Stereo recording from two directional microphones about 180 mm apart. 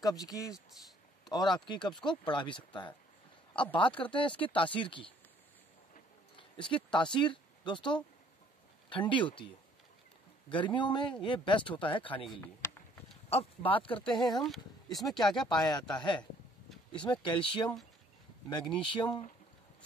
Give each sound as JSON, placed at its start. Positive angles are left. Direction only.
{"t": 0.0, "sound": "speech", "side_deg": 20}
{"t": 6.3, "sound": "speech", "side_deg": 30}
{"t": 10.5, "sound": "speech", "side_deg": 25}
{"t": 13.3, "sound": "speech", "side_deg": 30}
{"t": 14.0, "sound": "speech", "side_deg": 0}
{"t": 16.9, "sound": "speech", "side_deg": 25}